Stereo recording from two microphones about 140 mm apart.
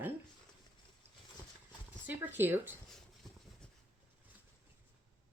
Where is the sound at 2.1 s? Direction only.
15° right (ahead or behind).